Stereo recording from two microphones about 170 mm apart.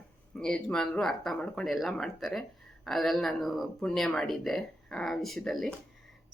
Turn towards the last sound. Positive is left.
turn(degrees=0)  # may be behind; listen again after turning